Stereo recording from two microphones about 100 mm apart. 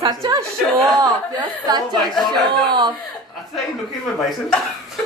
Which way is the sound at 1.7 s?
45° right (ahead or behind).